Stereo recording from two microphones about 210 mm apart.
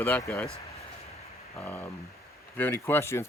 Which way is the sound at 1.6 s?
10° left (ahead or behind).